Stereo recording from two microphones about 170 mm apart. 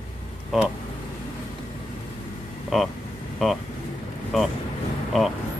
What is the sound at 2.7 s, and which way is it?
Speech, centre (ahead or behind).